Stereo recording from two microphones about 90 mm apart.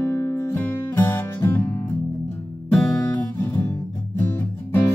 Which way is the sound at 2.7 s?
10° left (ahead or behind).